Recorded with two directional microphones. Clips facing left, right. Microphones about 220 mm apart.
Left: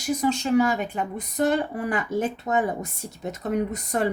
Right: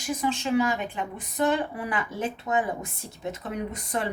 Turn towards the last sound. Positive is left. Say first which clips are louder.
# left 5 dB
turn(degrees=40)  # may be behind; listen again after turning